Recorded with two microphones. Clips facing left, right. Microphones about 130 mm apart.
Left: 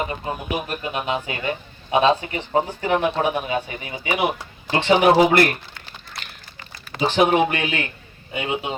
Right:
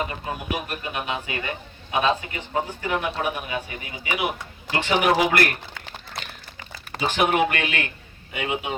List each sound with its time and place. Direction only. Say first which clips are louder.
0.0 s speech: left 3 dB; 25° left (ahead or behind)
7.0 s speech: left 4 dB; 30° left (ahead or behind)